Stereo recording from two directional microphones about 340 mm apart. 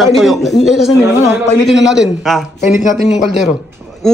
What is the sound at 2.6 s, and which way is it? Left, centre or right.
Speech, left.